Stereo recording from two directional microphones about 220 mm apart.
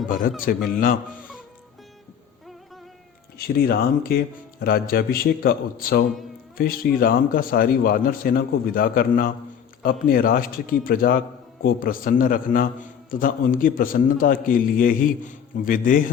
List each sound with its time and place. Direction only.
0.1 s a man's voice: 40° left (ahead or behind)
3.3 s a man's voice: 45° left (ahead or behind)